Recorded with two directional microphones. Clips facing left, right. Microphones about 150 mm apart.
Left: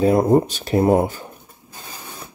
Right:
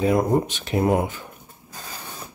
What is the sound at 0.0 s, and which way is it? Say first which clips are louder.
Speech: left 5 dB; 35° left (ahead or behind).